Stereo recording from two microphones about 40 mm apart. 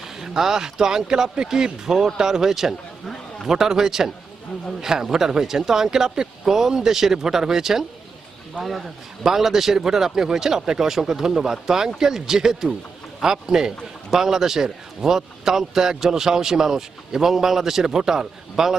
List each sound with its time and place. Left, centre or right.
0.2 s a man's voice: centre
8.6 s speech: right
9.2 s a man's voice: centre